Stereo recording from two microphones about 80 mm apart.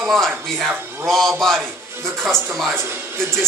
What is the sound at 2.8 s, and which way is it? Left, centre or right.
Speech, right.